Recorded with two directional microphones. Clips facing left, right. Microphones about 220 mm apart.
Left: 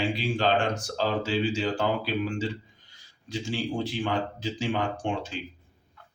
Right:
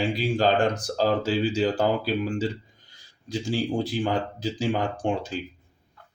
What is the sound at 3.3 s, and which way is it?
Speech, 40° right (ahead or behind).